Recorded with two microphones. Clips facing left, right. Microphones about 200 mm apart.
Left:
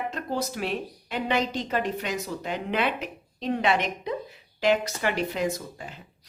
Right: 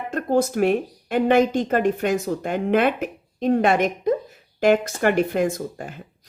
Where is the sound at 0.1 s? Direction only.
50° right (ahead or behind).